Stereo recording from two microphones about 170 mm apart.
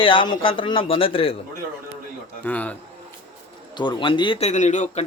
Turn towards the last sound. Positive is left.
turn(degrees=45)  # may be behind; listen again after turning